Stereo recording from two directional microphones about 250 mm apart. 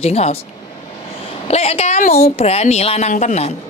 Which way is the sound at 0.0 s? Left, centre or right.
Left.